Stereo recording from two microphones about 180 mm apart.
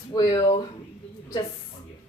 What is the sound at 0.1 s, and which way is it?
Speech, 25° left (ahead or behind).